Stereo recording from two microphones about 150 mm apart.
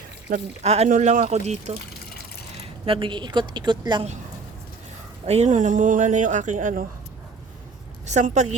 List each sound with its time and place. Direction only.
0.3 s speech: 90° right
0.6 s speech: 45° right (ahead or behind)
1.9 s water: 90° left
2.8 s a woman's voice: 35° right (ahead or behind)
5.2 s speech: 45° right (ahead or behind)
8.0 s speech: 50° right (ahead or behind)